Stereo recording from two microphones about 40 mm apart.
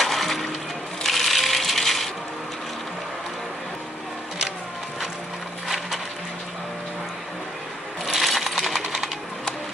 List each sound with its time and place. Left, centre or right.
0.0 s music: centre
1.0 s coin: centre
5.6 s a sound: centre
8.0 s coin: centre